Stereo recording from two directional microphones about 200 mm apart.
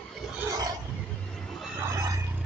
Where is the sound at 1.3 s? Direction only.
Centre (ahead or behind).